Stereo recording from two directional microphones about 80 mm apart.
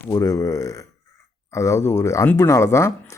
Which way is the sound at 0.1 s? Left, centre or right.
Left.